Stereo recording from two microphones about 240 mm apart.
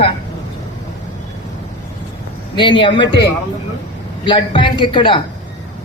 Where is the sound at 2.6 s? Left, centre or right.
Centre.